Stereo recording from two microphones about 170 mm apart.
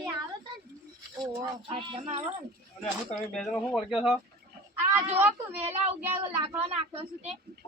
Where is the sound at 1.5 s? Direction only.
30° right (ahead or behind).